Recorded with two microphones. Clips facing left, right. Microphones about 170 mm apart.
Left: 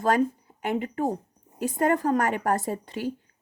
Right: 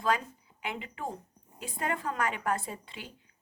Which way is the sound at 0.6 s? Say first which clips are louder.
Left 11 dB; 45° left (ahead or behind).